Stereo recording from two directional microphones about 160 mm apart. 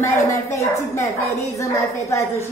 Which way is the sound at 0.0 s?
15° left (ahead or behind).